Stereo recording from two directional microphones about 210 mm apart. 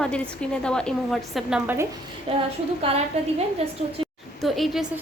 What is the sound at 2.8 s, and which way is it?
Speech, 30° right (ahead or behind).